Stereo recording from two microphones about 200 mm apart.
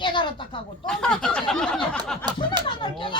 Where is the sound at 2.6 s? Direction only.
25° left (ahead or behind).